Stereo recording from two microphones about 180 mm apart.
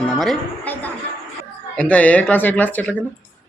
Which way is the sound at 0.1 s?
Centre (ahead or behind).